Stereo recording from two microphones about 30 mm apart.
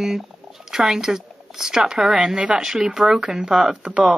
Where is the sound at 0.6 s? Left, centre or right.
Centre.